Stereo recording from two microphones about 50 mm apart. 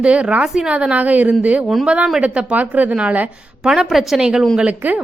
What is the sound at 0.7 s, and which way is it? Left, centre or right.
A woman's voice, right.